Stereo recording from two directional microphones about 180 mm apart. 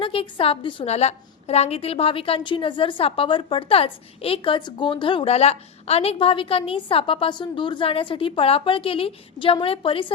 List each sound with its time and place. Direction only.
0.0 s a woman's voice: 30° left (ahead or behind)